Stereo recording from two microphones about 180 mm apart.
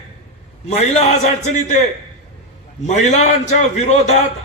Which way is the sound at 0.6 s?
40° left (ahead or behind).